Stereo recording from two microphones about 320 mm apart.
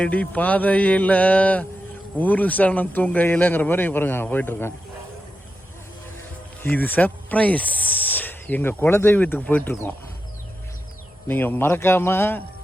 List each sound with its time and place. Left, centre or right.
0.0 s speech: centre
6.6 s speech: centre
11.3 s a man's voice: centre